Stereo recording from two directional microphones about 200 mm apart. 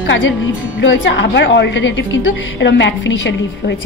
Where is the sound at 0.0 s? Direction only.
65° left (ahead or behind).